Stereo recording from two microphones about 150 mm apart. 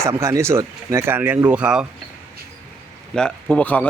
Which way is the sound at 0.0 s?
20° right (ahead or behind).